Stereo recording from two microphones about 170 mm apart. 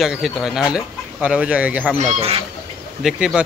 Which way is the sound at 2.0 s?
35° right (ahead or behind).